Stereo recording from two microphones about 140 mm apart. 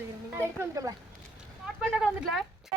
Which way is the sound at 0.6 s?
25° right (ahead or behind).